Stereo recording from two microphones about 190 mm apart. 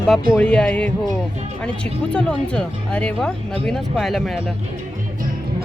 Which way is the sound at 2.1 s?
5° left (ahead or behind).